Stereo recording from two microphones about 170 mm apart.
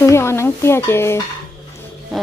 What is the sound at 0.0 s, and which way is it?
Speech, 15° left (ahead or behind).